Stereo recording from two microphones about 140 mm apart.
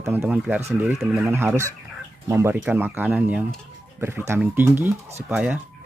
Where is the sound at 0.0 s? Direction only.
10° right (ahead or behind).